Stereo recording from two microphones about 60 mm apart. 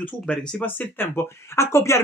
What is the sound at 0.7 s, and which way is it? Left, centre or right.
Speech, left.